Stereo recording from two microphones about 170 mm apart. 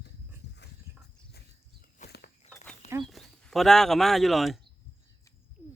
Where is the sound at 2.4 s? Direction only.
40° left (ahead or behind).